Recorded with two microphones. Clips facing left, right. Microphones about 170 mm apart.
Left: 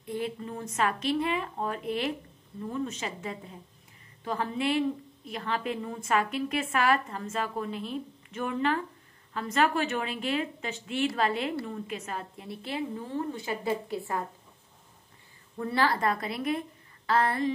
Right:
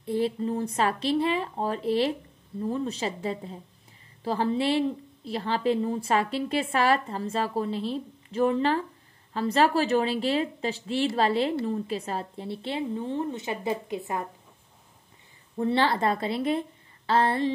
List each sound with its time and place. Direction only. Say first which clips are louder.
0.0 s a woman's voice: right 7 dB; 30° right (ahead or behind)
15.5 s a woman's voice: right 3 dB; 25° right (ahead or behind)